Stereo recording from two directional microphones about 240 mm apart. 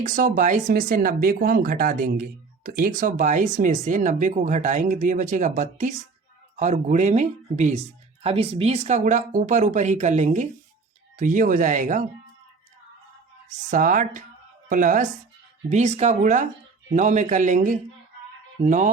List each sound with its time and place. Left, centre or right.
0.0 s speech: right
13.5 s speech: right